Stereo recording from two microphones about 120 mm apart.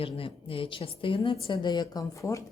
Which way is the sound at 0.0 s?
50° left (ahead or behind).